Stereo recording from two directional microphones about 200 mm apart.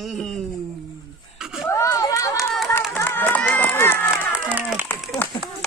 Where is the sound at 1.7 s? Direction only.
15° left (ahead or behind).